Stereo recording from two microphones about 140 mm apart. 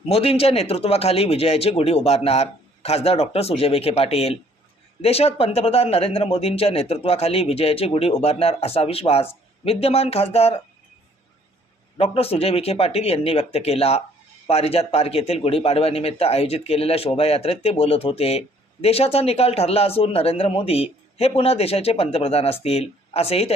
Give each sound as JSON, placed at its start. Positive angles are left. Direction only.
{"t": 0.1, "sound": "speech", "side_deg": 45}
{"t": 11.9, "sound": "speech", "side_deg": 45}